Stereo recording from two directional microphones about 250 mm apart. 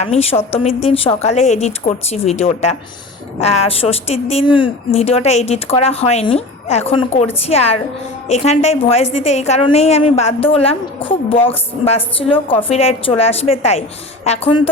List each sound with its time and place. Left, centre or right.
0.0 s a woman's voice: left